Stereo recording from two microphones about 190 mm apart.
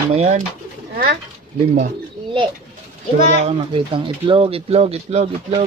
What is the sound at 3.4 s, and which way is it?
Speech, 30° right (ahead or behind).